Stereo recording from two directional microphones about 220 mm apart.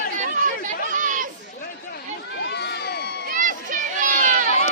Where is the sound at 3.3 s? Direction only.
35° right (ahead or behind).